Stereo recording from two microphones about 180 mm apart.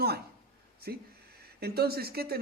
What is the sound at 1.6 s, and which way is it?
Speech, 60° right (ahead or behind).